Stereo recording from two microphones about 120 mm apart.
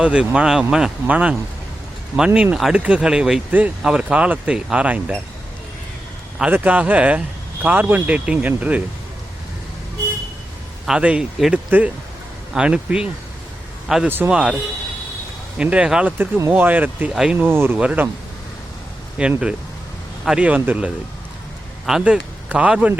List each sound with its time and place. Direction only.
0.0 s speech: 10° right (ahead or behind)
6.4 s speech: 15° right (ahead or behind)
10.8 s speech: 10° right (ahead or behind)
19.2 s speech: 10° right (ahead or behind)